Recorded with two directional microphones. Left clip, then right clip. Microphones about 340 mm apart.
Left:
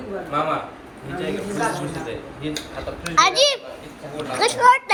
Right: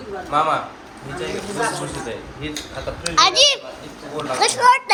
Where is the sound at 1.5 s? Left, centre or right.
Centre.